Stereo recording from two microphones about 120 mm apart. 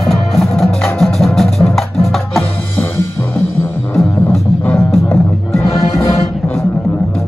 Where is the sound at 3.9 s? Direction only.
5° left (ahead or behind).